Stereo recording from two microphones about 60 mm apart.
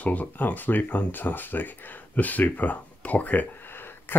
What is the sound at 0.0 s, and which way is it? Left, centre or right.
Speech, left.